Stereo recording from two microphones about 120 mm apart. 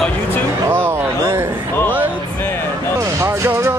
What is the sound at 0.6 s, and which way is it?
Speech, 20° right (ahead or behind).